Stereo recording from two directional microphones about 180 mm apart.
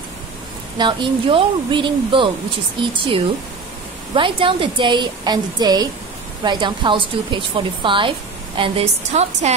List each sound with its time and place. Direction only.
0.7 s speech: 25° right (ahead or behind)
4.1 s a woman's voice: 30° right (ahead or behind)